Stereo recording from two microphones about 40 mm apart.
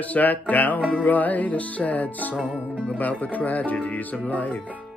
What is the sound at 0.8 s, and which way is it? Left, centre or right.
Speech, left.